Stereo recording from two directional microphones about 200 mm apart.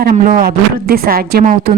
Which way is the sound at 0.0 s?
45° right (ahead or behind).